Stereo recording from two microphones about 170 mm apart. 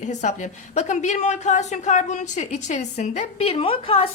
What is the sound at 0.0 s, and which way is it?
A woman's voice, 45° left (ahead or behind).